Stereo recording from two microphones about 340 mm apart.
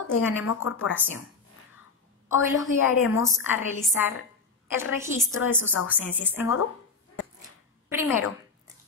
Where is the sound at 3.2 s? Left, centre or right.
Centre.